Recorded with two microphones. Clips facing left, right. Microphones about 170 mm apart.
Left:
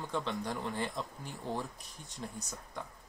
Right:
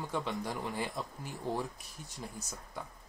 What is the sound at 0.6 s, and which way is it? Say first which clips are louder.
Speech: even; 15° right (ahead or behind).